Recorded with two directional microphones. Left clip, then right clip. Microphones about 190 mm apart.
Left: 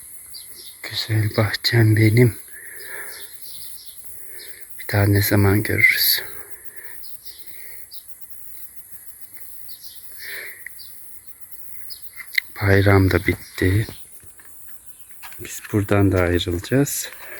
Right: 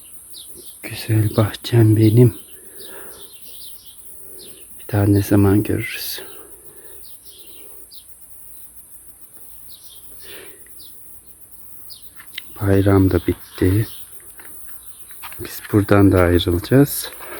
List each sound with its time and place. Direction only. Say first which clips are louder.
0.8 s speech: right 1 dB; 15° right (ahead or behind); by 2.3 s centre (ahead or behind)
2.8 s bird: left 4 dB; 5° left (ahead or behind)
4.8 s speech: right 2 dB; 5° left (ahead or behind)
12.3 s speech: left 2 dB; 5° left (ahead or behind)
15.4 s speech: right 5 dB; 5° left (ahead or behind)